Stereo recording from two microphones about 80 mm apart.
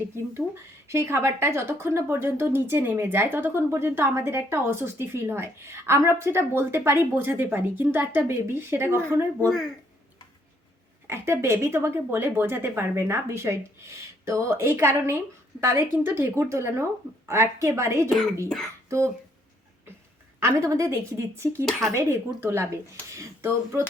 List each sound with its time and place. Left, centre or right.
0.9 s speech: right
11.0 s speech: right
18.4 s a sound: centre
18.9 s speech: right
20.4 s speech: right
21.7 s speech: centre
21.9 s speech: right